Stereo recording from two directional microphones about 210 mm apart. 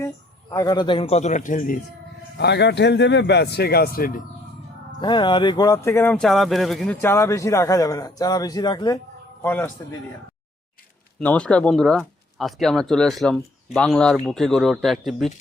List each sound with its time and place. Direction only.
0.5 s a man's voice: 15° left (ahead or behind); by 1.8 s 40° left (ahead or behind)
2.4 s a man's voice: 55° left (ahead or behind)
4.9 s speech: 20° left (ahead or behind)
9.4 s speech: 10° left (ahead or behind)
11.2 s speech: 5° left (ahead or behind)